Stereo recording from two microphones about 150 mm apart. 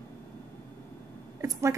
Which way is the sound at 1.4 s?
20° right (ahead or behind).